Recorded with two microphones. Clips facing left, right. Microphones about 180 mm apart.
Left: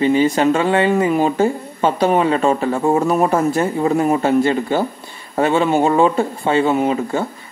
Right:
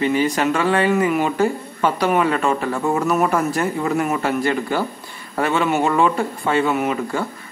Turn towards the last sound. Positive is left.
turn(degrees=25)  # may be behind; listen again after turning